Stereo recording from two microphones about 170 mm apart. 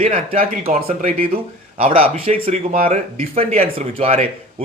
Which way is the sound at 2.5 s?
45° right (ahead or behind).